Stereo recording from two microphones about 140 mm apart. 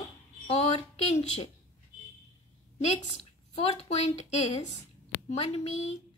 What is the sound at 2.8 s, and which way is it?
A woman's voice, 50° left (ahead or behind).